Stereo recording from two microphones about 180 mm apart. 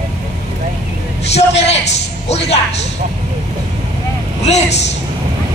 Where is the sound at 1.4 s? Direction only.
35° left (ahead or behind).